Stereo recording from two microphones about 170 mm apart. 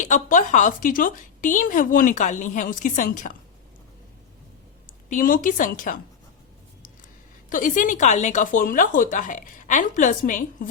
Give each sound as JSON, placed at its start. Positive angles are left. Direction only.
{"t": 0.0, "sound": "a woman's voice", "side_deg": 50}
{"t": 5.0, "sound": "a woman's voice", "side_deg": 55}
{"t": 7.5, "sound": "a woman's voice", "side_deg": 50}